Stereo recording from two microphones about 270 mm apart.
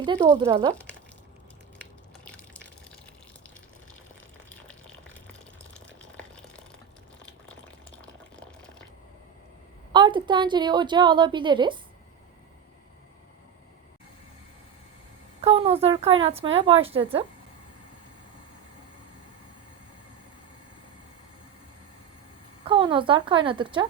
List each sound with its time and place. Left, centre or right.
0.0 s speech: centre
2.2 s water: centre
4.4 s water: centre
6.0 s a sound: centre
9.9 s a woman's voice: centre
15.4 s speech: right
22.6 s speech: centre